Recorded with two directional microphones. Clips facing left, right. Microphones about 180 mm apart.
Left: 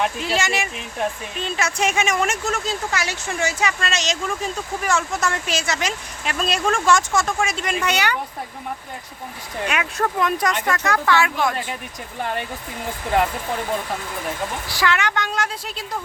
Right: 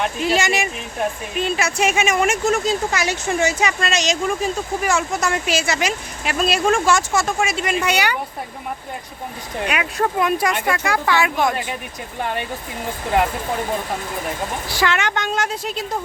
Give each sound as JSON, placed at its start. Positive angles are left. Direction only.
{"t": 0.2, "sound": "speech", "side_deg": -15}
{"t": 9.6, "sound": "speech", "side_deg": -5}
{"t": 14.8, "sound": "a woman's voice", "side_deg": -25}